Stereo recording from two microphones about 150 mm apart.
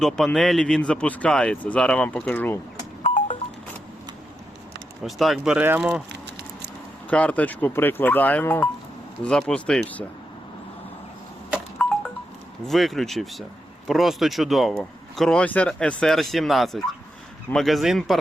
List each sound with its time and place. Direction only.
0.3 s speech: 5° left (ahead or behind)
3.0 s music: 55° left (ahead or behind)
5.0 s speech: centre (ahead or behind)
7.1 s speech: 10° left (ahead or behind)
11.8 s music: 5° left (ahead or behind)
12.6 s speech: centre (ahead or behind)